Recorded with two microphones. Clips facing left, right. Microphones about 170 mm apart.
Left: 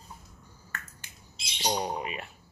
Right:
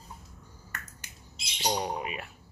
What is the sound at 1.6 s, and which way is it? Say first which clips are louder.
Speech: even; 5° left (ahead or behind).